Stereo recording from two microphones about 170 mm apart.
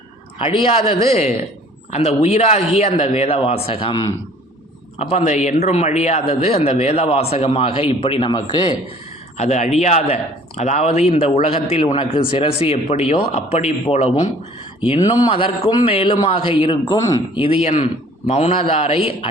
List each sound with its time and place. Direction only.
0.3 s a man's voice: 30° left (ahead or behind)
9.4 s a man's voice: 40° left (ahead or behind)